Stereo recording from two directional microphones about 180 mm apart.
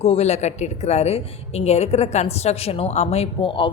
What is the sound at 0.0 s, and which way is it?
A woman's voice, 35° left (ahead or behind).